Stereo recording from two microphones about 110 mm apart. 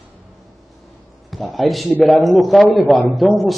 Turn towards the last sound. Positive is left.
turn(degrees=0)  # may be behind; listen again after turning